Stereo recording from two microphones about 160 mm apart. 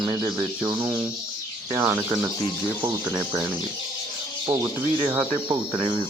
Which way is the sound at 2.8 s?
30° right (ahead or behind).